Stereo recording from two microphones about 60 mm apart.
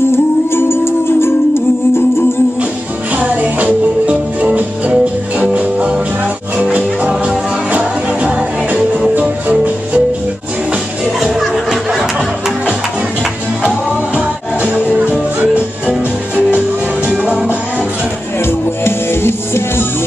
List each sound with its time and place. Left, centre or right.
0.1 s music: left
3.2 s music: right
11.1 s music: centre
13.7 s music: centre
18.4 s music: left